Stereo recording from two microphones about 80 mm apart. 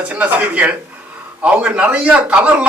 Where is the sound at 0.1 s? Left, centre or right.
Centre.